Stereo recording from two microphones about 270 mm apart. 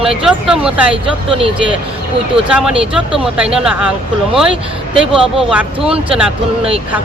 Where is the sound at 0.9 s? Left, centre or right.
Centre.